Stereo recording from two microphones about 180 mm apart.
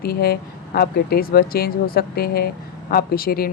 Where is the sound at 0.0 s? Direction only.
60° left (ahead or behind).